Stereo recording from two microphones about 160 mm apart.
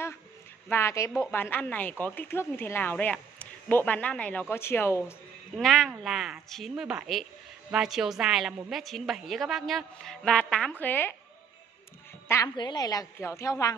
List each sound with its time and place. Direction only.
0.7 s speech: 15° left (ahead or behind)
5.6 s a woman's voice: centre (ahead or behind)
12.5 s a woman's voice: 25° left (ahead or behind)